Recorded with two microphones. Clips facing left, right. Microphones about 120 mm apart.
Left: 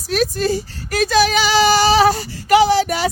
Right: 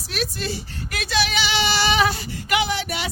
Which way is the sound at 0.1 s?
40° left (ahead or behind).